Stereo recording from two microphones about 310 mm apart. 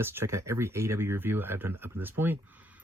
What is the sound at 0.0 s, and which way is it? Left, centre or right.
Speech, centre.